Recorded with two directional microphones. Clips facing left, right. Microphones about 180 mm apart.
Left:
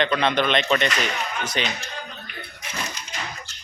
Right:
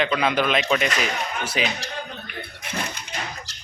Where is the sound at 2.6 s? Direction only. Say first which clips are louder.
Right 2 dB; 60° right (ahead or behind).